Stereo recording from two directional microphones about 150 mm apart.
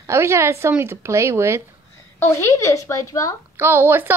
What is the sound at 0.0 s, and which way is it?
A woman's voice, 20° right (ahead or behind).